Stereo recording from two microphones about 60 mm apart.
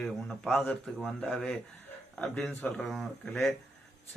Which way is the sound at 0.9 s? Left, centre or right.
Centre.